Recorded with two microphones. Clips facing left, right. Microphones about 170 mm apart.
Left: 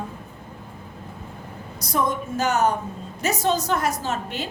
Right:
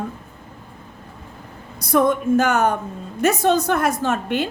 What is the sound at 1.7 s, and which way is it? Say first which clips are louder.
A woman's voice: right 7 dB; 55° right (ahead or behind).